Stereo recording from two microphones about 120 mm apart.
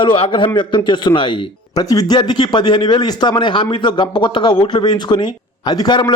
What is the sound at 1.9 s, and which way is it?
Speech, 30° left (ahead or behind).